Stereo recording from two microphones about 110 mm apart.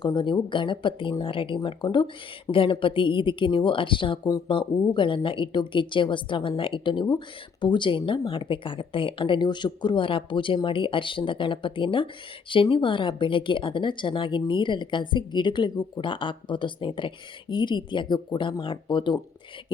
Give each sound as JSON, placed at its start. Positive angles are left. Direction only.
{"t": 0.0, "sound": "a woman's voice", "side_deg": 45}
{"t": 4.2, "sound": "speech", "side_deg": 30}
{"t": 4.4, "sound": "a woman's voice", "side_deg": 50}